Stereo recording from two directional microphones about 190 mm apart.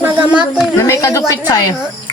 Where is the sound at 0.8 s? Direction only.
15° left (ahead or behind).